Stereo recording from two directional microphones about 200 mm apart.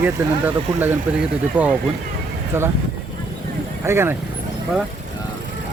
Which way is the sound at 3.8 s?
10° right (ahead or behind).